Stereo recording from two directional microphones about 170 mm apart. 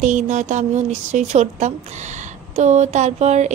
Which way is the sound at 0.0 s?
45° right (ahead or behind).